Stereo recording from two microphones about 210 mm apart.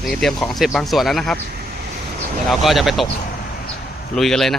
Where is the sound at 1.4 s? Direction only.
50° right (ahead or behind).